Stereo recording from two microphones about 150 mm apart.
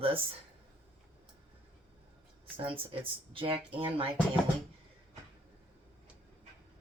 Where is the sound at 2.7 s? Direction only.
35° right (ahead or behind).